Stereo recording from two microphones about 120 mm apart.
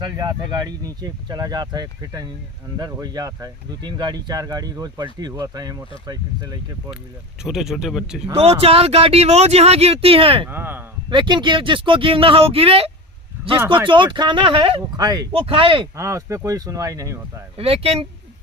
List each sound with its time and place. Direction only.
0.0 s speech: 35° right (ahead or behind)
7.4 s speech: 5° right (ahead or behind)
8.4 s speech: 55° right (ahead or behind)
10.5 s speech: 15° right (ahead or behind)
11.1 s speech: 40° right (ahead or behind)
13.8 s speech: 40° right (ahead or behind)
14.9 s speech: 30° right (ahead or behind)
15.3 s speech: 50° right (ahead or behind)
16.0 s speech: 25° right (ahead or behind)
17.6 s speech: 55° right (ahead or behind)